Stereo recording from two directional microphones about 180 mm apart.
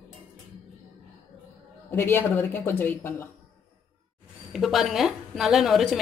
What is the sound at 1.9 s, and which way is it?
Speech, 15° left (ahead or behind).